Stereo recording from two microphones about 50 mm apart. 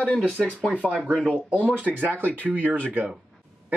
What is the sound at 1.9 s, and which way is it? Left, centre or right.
Speech, right.